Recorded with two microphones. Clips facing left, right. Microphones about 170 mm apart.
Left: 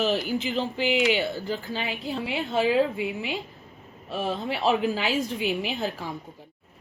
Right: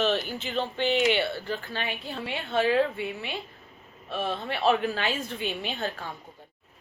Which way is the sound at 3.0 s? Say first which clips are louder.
Left 4 dB; 90° left.